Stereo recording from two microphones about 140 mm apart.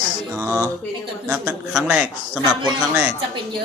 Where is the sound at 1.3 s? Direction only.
5° right (ahead or behind).